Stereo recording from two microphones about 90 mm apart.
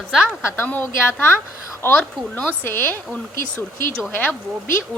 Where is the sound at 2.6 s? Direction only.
25° left (ahead or behind).